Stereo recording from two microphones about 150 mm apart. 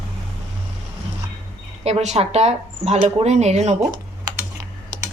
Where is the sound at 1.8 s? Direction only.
45° right (ahead or behind).